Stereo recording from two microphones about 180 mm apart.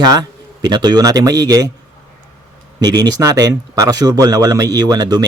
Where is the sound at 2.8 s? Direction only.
20° right (ahead or behind).